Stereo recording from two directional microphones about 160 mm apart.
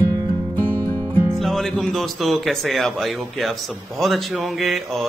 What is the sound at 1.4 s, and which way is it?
Speech, centre (ahead or behind).